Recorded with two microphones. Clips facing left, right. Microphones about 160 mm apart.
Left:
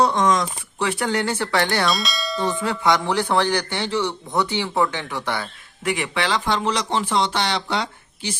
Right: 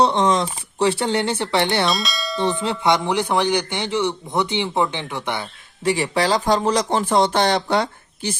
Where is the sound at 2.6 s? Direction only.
20° right (ahead or behind).